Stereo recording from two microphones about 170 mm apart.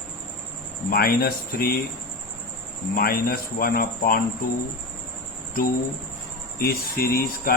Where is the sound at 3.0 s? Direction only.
60° left (ahead or behind).